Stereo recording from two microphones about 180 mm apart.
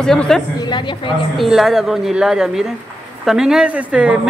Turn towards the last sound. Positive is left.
turn(degrees=-5)  # may be behind; listen again after turning